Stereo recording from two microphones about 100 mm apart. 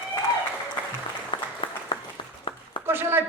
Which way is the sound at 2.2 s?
55° left (ahead or behind).